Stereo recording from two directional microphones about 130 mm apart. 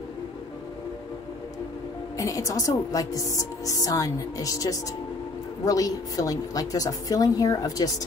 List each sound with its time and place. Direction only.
2.1 s speech: 25° left (ahead or behind)